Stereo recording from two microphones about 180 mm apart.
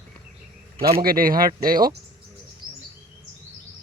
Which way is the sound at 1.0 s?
55° right (ahead or behind).